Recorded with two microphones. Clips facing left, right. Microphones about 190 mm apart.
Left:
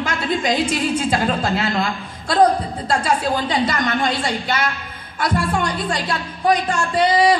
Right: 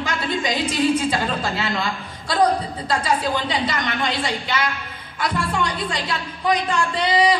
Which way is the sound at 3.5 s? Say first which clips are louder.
Left 4 dB; 45° left (ahead or behind).